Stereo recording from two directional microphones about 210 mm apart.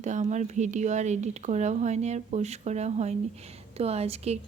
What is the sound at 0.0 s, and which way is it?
A woman's voice, 35° right (ahead or behind).